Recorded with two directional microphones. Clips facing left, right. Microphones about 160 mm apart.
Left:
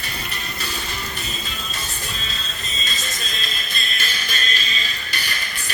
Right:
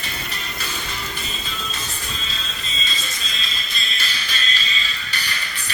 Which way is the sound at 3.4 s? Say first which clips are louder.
Left 1 dB; 50° left (ahead or behind).